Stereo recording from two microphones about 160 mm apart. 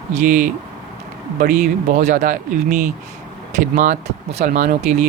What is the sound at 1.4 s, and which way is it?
Speech, 70° right (ahead or behind).